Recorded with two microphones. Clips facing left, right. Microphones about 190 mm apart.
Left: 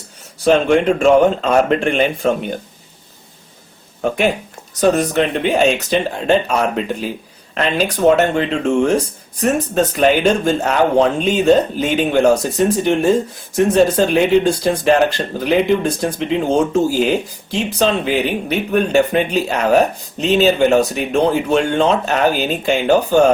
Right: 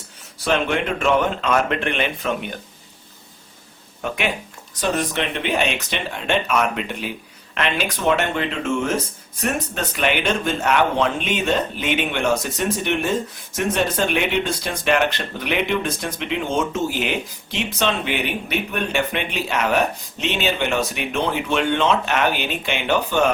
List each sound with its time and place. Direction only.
0.4 s speech: 35° left (ahead or behind)
4.8 s speech: 40° left (ahead or behind)